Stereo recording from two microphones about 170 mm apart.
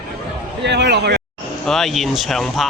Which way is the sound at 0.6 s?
90° right.